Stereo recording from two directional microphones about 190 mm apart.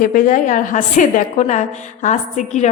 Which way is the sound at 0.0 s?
45° left (ahead or behind).